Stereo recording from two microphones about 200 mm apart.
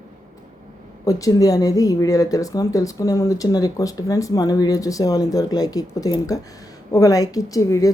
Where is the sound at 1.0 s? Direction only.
15° left (ahead or behind).